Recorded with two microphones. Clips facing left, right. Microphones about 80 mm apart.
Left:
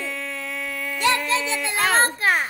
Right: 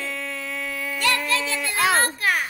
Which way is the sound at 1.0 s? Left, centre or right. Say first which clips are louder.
Left 2 dB; left.